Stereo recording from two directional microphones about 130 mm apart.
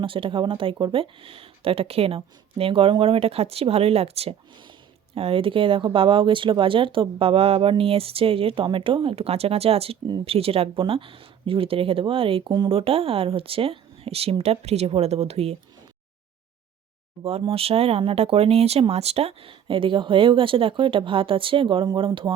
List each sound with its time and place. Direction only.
0.0 s speech: 40° right (ahead or behind)
17.2 s speech: 50° right (ahead or behind)